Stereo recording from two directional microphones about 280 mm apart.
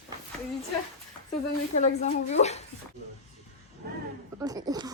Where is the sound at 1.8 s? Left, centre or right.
Left.